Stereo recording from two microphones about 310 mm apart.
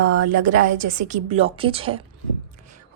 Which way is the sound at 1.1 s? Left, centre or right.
Right.